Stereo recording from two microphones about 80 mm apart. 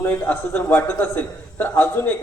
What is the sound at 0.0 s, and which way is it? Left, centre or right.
A man's voice, left.